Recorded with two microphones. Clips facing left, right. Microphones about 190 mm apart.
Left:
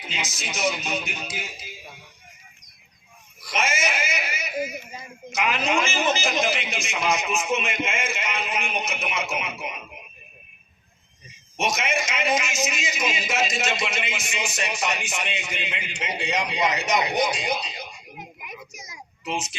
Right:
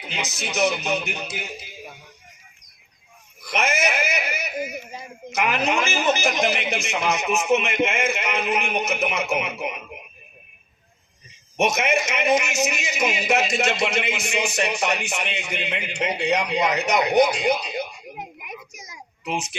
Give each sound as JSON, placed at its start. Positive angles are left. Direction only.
{"t": 0.1, "sound": "a man's voice", "side_deg": -60}
{"t": 3.5, "sound": "a sound", "side_deg": -60}
{"t": 5.4, "sound": "a man's voice", "side_deg": -60}
{"t": 11.5, "sound": "a man's voice", "side_deg": -60}